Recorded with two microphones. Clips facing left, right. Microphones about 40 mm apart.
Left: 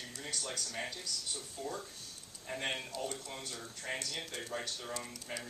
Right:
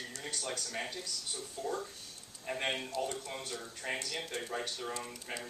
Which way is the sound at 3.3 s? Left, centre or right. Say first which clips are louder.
Right 3 dB; right.